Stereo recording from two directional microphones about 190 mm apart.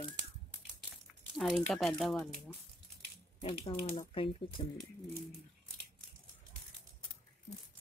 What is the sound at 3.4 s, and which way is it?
Speech, 25° left (ahead or behind).